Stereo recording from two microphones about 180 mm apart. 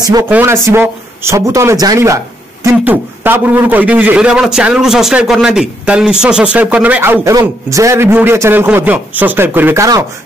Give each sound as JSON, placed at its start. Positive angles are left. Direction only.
{"t": 0.0, "sound": "speech", "side_deg": -20}